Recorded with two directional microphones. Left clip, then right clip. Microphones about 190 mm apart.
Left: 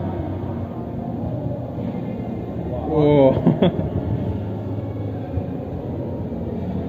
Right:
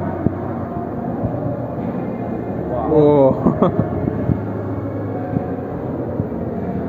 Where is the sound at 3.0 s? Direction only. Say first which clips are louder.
Right 2 dB; 35° right (ahead or behind).